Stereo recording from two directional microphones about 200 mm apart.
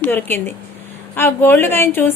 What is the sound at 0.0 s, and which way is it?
A woman's voice, 10° left (ahead or behind).